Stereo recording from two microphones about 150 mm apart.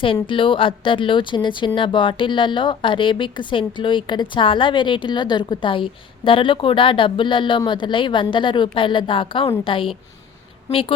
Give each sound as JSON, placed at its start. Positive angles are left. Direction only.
{"t": 0.0, "sound": "speech", "side_deg": 35}